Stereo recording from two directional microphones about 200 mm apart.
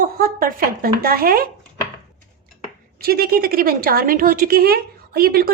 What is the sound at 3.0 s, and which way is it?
Speech, 50° right (ahead or behind).